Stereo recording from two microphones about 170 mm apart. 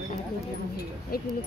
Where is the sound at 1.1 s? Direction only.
60° left (ahead or behind).